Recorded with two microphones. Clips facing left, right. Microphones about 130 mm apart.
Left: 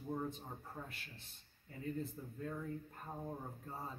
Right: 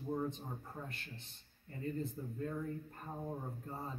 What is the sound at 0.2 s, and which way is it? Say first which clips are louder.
A man's voice: right 3 dB; 5° left (ahead or behind).